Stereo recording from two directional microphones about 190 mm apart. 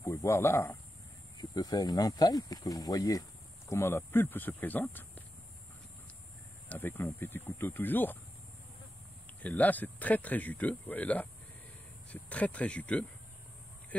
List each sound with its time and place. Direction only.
0.0 s speech: 15° left (ahead or behind)
6.7 s speech: 10° left (ahead or behind)
9.4 s speech: 10° left (ahead or behind)